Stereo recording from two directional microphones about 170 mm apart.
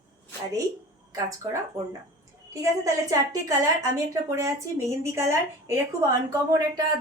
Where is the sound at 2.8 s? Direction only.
20° right (ahead or behind).